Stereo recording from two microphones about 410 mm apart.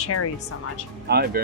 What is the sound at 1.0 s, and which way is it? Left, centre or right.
Speech, right.